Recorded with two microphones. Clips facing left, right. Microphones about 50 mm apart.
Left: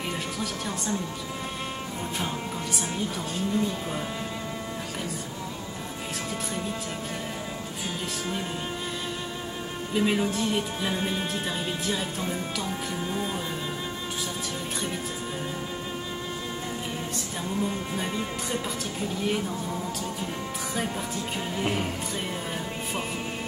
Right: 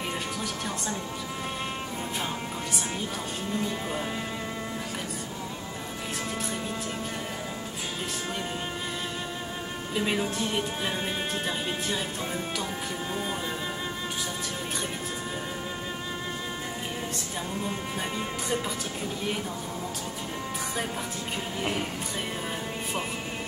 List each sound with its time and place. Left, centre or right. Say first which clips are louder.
3.5 s speech: left 1 dB; centre
9.9 s speech: left 3 dB; centre
11.4 s music: left 1 dB; centre
17.6 s speech: left 2 dB; centre
21.5 s speech: left 2 dB; centre